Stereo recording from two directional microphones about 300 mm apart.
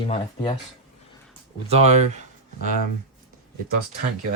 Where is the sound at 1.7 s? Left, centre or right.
Right.